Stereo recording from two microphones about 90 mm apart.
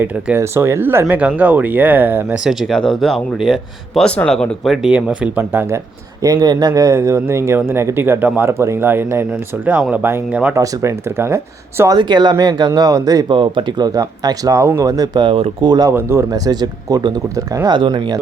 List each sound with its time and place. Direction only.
0.3 s speech: 30° right (ahead or behind)
2.4 s speech: 5° right (ahead or behind)
4.0 s speech: 10° left (ahead or behind)
4.9 s speech: 10° right (ahead or behind)
5.4 s speech: 25° right (ahead or behind)
6.2 s speech: 45° right (ahead or behind); by 10.5 s 20° right (ahead or behind)
10.5 s speech: 30° right (ahead or behind)
11.9 s speech: 55° right (ahead or behind)
13.2 s speech: 65° right (ahead or behind); by 15.9 s 50° right (ahead or behind)
15.9 s speech: 30° right (ahead or behind)
16.3 s speech: 45° right (ahead or behind)
17.7 s speech: 60° right (ahead or behind)